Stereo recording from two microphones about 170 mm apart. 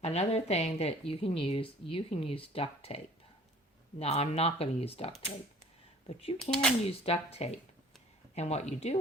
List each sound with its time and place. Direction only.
0.0 s a woman's voice: 40° left (ahead or behind)
6.4 s speech: 5° left (ahead or behind)
6.8 s a woman's voice: 35° left (ahead or behind)